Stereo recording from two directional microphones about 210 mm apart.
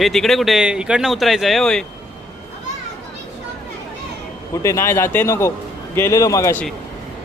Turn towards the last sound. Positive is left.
turn(degrees=10)  # may be behind; listen again after turning